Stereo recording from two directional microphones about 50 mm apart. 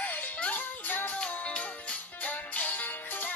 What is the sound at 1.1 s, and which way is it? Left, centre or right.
Music, left.